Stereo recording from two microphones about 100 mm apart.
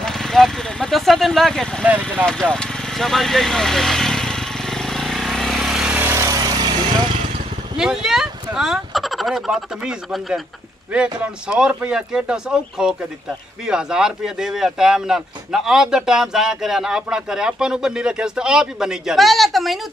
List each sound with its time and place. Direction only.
0.0 s vehicle: 5° left (ahead or behind)
5.9 s vehicle: 20° right (ahead or behind)
6.2 s vehicle: 40° right (ahead or behind)
7.7 s speech: 5° right (ahead or behind)